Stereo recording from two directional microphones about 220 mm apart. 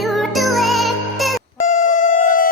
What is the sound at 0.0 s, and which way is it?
Music, centre (ahead or behind).